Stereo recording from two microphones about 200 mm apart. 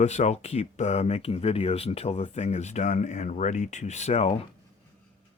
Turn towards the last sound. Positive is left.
turn(degrees=30)  # may be behind; listen again after turning